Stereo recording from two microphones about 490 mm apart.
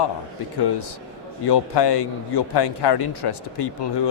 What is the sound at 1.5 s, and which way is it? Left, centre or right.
Speech, left.